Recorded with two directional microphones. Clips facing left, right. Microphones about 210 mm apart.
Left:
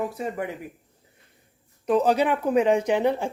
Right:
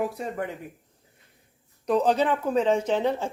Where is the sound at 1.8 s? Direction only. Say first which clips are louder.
Left 1 dB; 5° left (ahead or behind).